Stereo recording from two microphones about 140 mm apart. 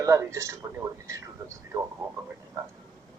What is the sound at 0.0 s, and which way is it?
Speech, 20° right (ahead or behind).